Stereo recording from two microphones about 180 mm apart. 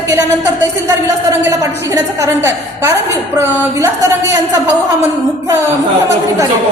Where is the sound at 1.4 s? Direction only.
15° right (ahead or behind).